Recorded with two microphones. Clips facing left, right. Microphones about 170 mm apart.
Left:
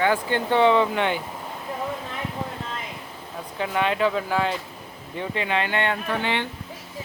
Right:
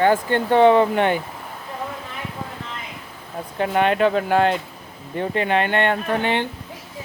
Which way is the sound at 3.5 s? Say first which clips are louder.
Right 5 dB; 50° right (ahead or behind).